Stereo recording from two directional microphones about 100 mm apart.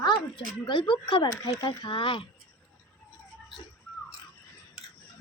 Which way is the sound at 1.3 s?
35° left (ahead or behind).